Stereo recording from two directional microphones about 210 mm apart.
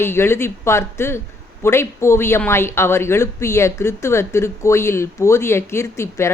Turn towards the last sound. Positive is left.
turn(degrees=10)  # may be behind; listen again after turning